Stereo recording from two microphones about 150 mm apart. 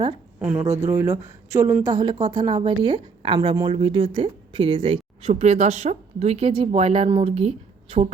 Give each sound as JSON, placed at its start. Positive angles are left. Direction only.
{"t": 0.3, "sound": "speech", "side_deg": -10}
{"t": 0.6, "sound": "speech", "side_deg": -45}
{"t": 0.9, "sound": "a woman's voice", "side_deg": -20}